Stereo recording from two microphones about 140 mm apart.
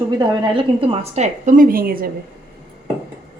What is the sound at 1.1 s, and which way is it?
Speech, 60° right (ahead or behind).